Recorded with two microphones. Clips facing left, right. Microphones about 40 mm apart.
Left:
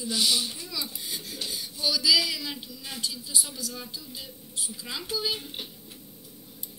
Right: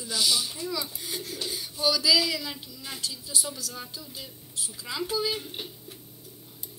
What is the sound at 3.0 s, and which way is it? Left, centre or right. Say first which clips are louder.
Speech: left 1 dB; left.